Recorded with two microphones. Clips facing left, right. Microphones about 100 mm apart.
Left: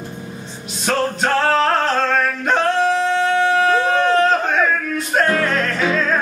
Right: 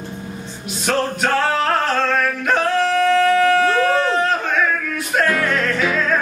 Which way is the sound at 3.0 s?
20° left (ahead or behind).